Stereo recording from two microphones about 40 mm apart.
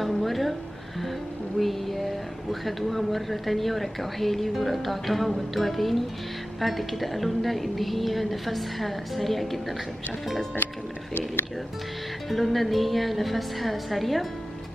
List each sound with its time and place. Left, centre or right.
0.0 s a sound: centre
1.6 s speech: centre
12.3 s speech: centre